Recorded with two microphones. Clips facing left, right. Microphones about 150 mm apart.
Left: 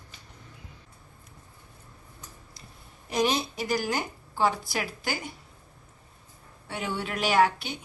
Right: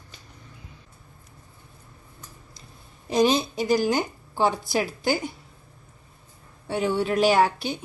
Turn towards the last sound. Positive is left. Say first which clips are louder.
# right 3 dB
turn(degrees=-30)  # may be behind; listen again after turning